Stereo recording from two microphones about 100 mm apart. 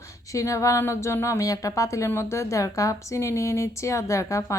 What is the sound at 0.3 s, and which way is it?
A woman's voice, 35° left (ahead or behind).